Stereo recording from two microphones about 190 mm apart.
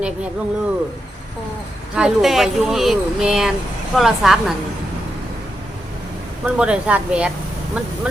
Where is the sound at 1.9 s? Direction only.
Centre (ahead or behind).